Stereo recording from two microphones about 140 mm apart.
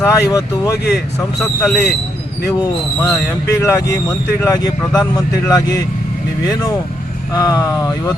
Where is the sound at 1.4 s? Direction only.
Centre (ahead or behind).